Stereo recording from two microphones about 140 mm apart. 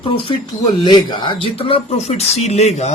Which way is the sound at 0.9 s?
35° left (ahead or behind).